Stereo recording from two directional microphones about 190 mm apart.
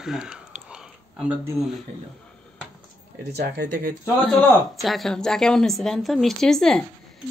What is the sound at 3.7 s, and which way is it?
Speech, 45° right (ahead or behind).